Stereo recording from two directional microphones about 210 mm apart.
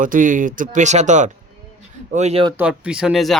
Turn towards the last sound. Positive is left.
turn(degrees=0)  # may be behind; listen again after turning